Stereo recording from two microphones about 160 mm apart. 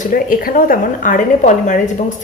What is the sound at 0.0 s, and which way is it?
A woman's voice, 60° left (ahead or behind).